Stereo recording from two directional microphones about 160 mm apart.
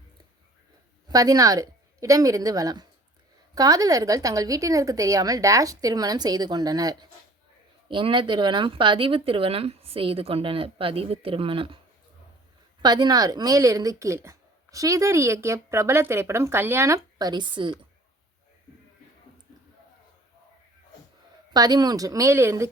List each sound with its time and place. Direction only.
1.0 s a woman's voice: 20° right (ahead or behind)
12.8 s a woman's voice: 25° right (ahead or behind)
21.5 s a woman's voice: 25° right (ahead or behind)